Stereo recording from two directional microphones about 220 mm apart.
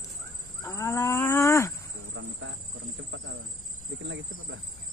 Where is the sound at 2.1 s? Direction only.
60° right (ahead or behind).